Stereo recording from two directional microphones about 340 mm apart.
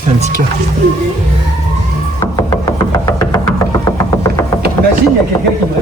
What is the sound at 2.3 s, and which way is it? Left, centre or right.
Music, centre.